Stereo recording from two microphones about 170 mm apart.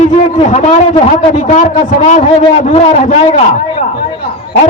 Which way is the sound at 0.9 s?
40° left (ahead or behind).